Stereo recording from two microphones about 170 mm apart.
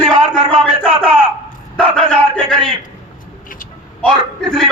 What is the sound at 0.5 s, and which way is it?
Speech, 30° right (ahead or behind).